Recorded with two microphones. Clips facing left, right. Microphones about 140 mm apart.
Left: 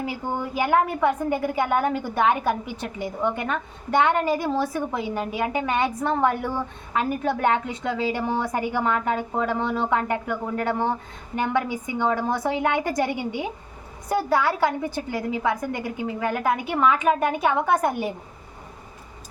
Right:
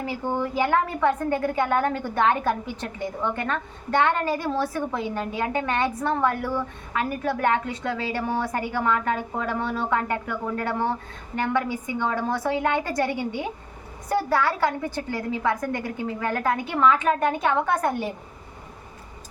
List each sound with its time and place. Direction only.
0.0 s a woman's voice: 15° left (ahead or behind)